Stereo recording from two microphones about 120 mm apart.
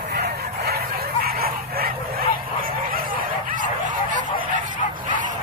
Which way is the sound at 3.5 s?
90° right.